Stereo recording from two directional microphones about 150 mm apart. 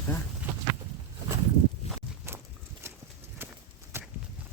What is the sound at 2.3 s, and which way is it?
Walk, 15° right (ahead or behind).